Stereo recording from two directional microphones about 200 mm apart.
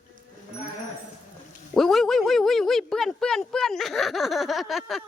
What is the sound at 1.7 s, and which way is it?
Speech, centre (ahead or behind).